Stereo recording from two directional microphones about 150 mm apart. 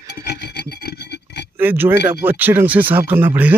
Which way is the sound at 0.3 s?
90° left.